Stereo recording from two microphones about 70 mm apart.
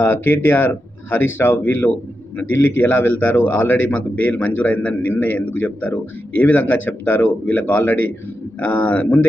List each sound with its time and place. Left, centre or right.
0.0 s a man's voice: left